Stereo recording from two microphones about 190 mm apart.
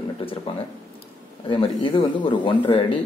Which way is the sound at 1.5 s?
25° left (ahead or behind).